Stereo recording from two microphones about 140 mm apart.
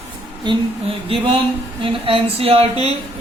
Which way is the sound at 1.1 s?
40° right (ahead or behind).